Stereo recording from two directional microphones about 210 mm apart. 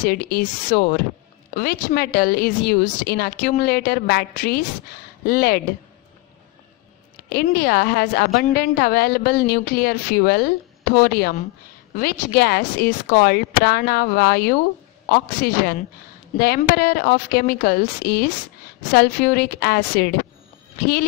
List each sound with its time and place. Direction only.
0.0 s speech: 45° left (ahead or behind)
7.4 s speech: 45° left (ahead or behind)